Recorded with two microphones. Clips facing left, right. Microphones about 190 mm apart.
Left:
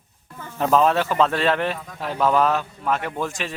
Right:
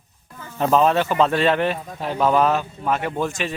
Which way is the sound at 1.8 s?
30° right (ahead or behind).